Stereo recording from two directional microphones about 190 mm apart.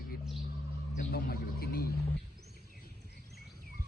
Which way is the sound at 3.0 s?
60° right (ahead or behind).